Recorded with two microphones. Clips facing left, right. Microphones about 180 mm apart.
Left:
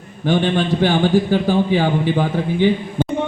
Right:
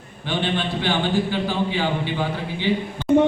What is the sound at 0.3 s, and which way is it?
A man's voice, 45° left (ahead or behind).